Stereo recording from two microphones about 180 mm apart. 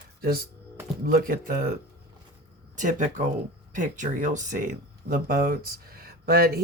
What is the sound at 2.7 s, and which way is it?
Speech, 45° right (ahead or behind).